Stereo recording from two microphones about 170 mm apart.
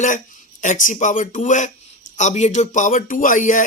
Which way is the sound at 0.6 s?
50° left (ahead or behind).